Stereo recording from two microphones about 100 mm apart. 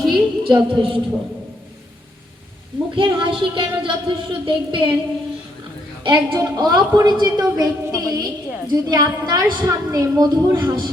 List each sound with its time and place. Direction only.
0.1 s a sound: 50° right (ahead or behind)
2.9 s speech: 55° right (ahead or behind)
6.1 s a woman's voice: 50° right (ahead or behind)